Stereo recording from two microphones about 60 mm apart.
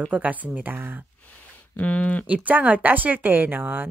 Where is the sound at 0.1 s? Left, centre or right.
Right.